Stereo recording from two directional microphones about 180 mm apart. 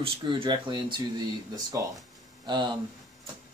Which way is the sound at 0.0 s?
30° right (ahead or behind).